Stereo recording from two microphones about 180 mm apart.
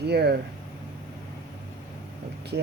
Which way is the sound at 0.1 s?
65° right (ahead or behind).